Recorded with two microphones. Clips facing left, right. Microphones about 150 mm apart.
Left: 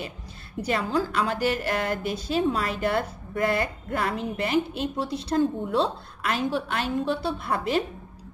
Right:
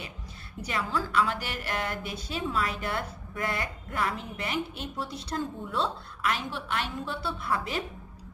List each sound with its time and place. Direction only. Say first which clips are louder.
0.6 s a woman's voice: left 6 dB; 30° left (ahead or behind)